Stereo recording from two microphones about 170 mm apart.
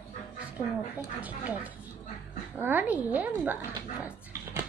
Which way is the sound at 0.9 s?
10° right (ahead or behind).